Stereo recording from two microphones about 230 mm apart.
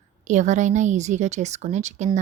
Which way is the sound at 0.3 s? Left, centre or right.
Right.